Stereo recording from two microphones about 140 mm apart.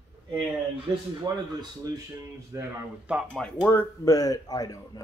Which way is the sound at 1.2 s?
30° right (ahead or behind).